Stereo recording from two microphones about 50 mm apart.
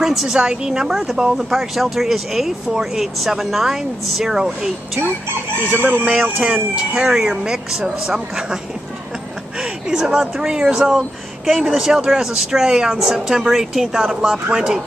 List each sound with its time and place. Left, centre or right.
0.0 s speech: centre
5.7 s speech: right
6.5 s speech: right
7.0 s speech: centre
9.6 s a sound: centre
10.2 s speech: centre